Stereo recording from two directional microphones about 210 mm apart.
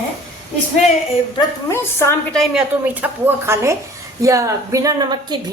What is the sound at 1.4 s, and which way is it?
A woman's voice, 10° left (ahead or behind).